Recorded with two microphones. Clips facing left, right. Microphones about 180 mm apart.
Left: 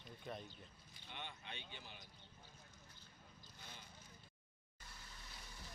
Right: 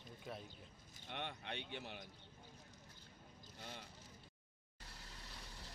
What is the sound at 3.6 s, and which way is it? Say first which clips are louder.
Speech: right 7 dB; 70° right (ahead or behind).